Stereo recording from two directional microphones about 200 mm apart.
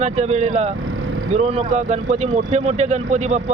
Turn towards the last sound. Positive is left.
turn(degrees=-35)  # may be behind; listen again after turning